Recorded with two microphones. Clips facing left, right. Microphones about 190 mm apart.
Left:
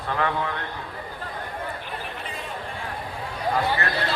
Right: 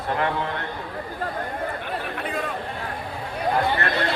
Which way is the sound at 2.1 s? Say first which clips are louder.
Right 7 dB; 60° right (ahead or behind).